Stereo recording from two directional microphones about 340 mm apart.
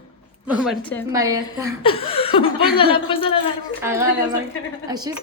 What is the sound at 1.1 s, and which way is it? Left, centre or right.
Speech, centre.